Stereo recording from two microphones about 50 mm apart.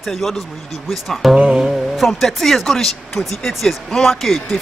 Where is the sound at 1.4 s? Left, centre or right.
Right.